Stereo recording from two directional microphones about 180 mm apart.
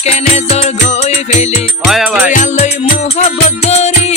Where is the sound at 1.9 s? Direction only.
5° right (ahead or behind).